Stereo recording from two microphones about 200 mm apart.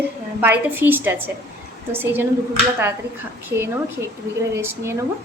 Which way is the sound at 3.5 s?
55° right (ahead or behind).